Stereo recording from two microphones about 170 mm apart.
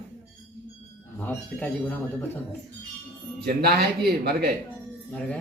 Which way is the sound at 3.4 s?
65° right (ahead or behind).